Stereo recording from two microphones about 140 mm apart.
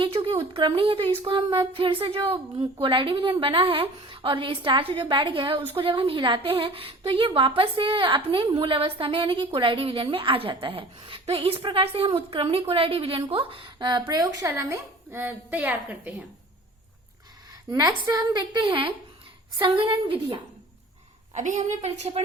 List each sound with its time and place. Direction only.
0.0 s a woman's voice: 40° right (ahead or behind); by 16.2 s 10° right (ahead or behind)
17.7 s a woman's voice: 30° right (ahead or behind)
21.3 s a woman's voice: 65° right (ahead or behind)